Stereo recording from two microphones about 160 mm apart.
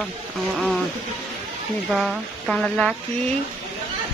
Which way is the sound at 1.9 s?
Centre (ahead or behind).